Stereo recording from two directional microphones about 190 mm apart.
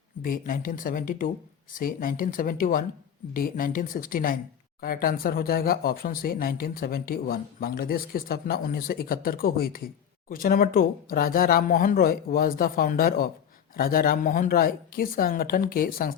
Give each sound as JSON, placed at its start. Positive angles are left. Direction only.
{"t": 0.2, "sound": "speech", "side_deg": 45}